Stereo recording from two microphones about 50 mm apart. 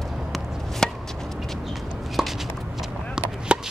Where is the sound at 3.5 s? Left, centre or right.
Right.